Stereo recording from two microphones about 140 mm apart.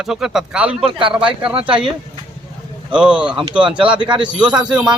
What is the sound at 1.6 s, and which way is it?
Speech, 40° right (ahead or behind).